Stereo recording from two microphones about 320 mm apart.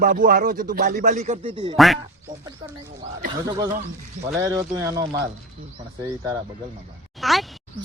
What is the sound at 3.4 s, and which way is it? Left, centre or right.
Speech, centre.